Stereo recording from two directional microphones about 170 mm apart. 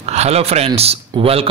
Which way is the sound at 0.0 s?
40° right (ahead or behind).